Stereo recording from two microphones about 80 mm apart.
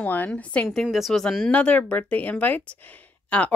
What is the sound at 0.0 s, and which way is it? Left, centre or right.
Speech, left.